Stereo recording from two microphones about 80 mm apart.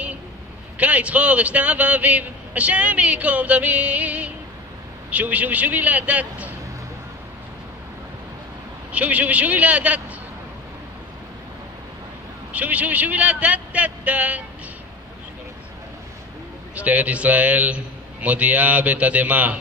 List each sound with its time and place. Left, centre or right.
0.7 s a man's voice: centre
8.9 s a man's voice: centre
12.5 s a man's voice: centre
16.7 s a man's voice: centre